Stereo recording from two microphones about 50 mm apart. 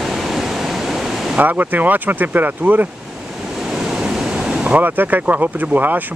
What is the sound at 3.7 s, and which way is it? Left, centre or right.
Waves, centre.